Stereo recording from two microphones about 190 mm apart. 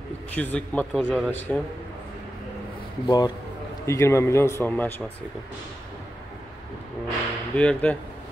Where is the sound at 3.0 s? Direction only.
20° left (ahead or behind).